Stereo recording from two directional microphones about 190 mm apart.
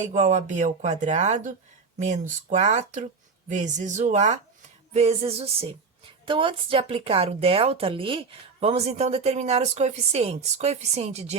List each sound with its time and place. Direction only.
0.0 s speech: 40° right (ahead or behind)